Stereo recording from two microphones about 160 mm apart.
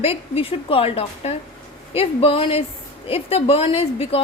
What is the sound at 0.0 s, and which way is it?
A woman's voice, 35° left (ahead or behind).